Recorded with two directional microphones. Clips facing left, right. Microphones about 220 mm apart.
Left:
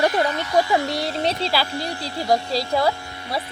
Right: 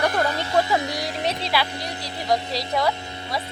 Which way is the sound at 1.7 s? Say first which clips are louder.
Left 4 dB; 20° right (ahead or behind).